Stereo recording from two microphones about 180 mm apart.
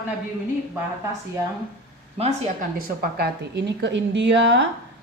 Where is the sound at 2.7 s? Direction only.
65° right (ahead or behind).